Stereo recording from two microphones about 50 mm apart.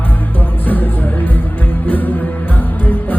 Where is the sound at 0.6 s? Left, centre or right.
Left.